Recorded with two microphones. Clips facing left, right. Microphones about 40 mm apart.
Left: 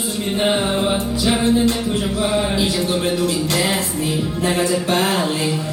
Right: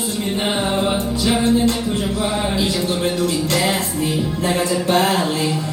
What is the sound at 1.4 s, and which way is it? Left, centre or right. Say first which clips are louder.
Music: even; centre.